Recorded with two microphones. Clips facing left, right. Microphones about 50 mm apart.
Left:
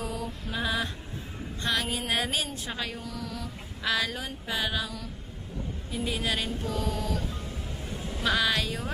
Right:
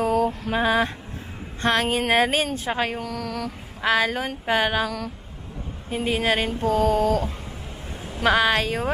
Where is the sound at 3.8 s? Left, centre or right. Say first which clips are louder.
Right 8 dB; right.